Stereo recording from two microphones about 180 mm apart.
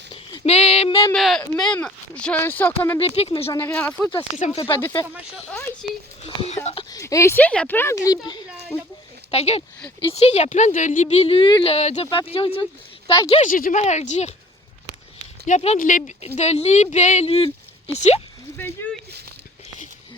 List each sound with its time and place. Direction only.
0.1 s a sound: 25° left (ahead or behind)
1.1 s speech: centre (ahead or behind)
3.0 s speech: 35° left (ahead or behind)
3.7 s speech: 5° left (ahead or behind)
4.4 s speech: 35° left (ahead or behind)
5.8 s speech: centre (ahead or behind)
6.2 s a sound: 35° left (ahead or behind)
6.9 s speech: 15° left (ahead or behind)
9.3 s speech: 35° left (ahead or behind)
13.5 s speech: 50° left (ahead or behind)
15.4 s speech: 40° left (ahead or behind)
18.5 s speech: 10° left (ahead or behind)